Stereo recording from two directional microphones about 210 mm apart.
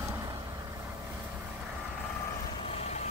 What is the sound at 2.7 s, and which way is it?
Vehicle, 30° left (ahead or behind).